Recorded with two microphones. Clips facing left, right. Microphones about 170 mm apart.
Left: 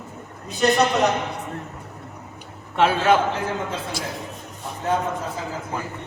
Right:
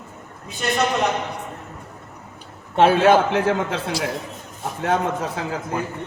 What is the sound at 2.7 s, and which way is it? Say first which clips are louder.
Speech: right 4 dB; 40° right (ahead or behind).